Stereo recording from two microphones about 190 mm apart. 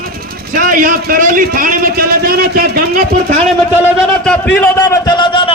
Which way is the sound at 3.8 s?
Centre (ahead or behind).